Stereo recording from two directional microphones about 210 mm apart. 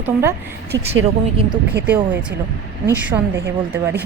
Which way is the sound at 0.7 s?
15° right (ahead or behind).